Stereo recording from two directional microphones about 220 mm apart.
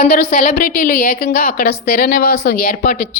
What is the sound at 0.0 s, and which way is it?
A woman's voice, 40° left (ahead or behind).